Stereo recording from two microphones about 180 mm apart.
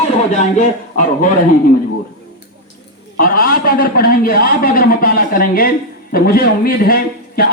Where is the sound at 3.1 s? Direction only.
55° left (ahead or behind).